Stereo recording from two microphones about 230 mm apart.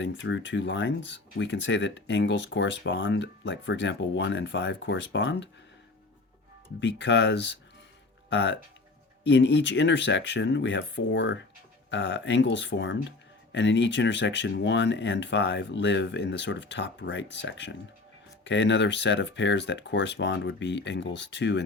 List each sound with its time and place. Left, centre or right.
0.0 s speech: left
6.7 s speech: left